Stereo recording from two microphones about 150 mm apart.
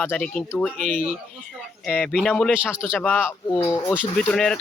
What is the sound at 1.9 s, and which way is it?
Speech, 5° left (ahead or behind).